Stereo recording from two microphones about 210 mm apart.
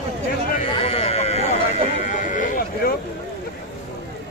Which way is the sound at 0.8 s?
30° left (ahead or behind).